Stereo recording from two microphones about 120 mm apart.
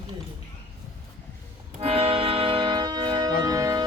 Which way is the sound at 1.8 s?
55° right (ahead or behind).